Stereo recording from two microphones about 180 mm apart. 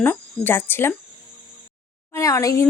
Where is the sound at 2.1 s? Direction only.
15° left (ahead or behind).